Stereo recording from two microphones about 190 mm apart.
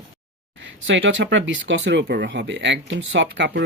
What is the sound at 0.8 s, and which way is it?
Speech, 75° right (ahead or behind).